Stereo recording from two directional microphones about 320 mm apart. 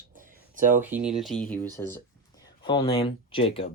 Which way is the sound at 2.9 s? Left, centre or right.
Centre.